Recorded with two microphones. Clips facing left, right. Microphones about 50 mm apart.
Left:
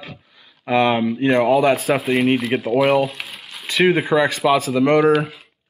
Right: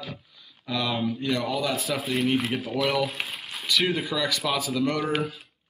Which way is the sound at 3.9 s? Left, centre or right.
Left.